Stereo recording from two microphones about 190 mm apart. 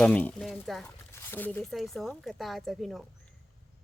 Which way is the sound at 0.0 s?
5° left (ahead or behind).